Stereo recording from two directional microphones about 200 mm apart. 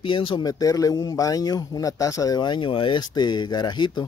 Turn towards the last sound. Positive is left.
turn(degrees=20)  # may be behind; listen again after turning